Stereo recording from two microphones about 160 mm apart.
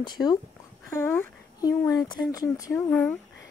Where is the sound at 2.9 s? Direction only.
10° left (ahead or behind).